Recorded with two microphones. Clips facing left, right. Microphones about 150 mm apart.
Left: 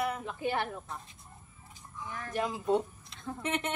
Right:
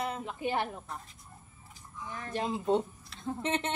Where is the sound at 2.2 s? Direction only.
25° right (ahead or behind).